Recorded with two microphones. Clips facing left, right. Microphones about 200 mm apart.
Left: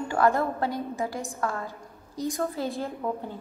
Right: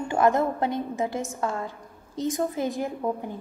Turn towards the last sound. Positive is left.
turn(degrees=-15)  # may be behind; listen again after turning